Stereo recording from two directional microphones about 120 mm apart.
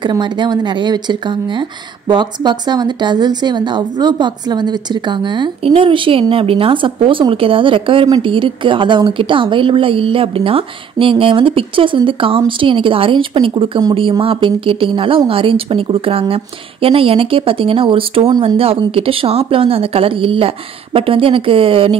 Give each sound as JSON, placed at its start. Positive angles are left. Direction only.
{"t": 0.0, "sound": "a woman's voice", "side_deg": -40}